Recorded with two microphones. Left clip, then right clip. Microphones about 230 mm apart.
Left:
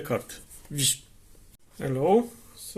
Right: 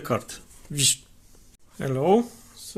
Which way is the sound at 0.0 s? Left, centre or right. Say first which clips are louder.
Right 2 dB; right.